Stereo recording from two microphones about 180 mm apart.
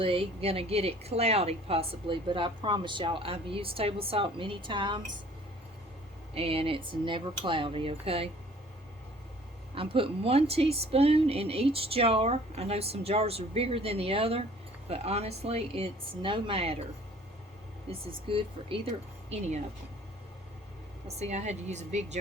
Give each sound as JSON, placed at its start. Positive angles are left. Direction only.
{"t": 0.0, "sound": "a woman's voice", "side_deg": -30}
{"t": 6.3, "sound": "a woman's voice", "side_deg": -30}
{"t": 9.7, "sound": "a woman's voice", "side_deg": -30}
{"t": 18.3, "sound": "a woman's voice", "side_deg": -30}
{"t": 21.2, "sound": "a woman's voice", "side_deg": -40}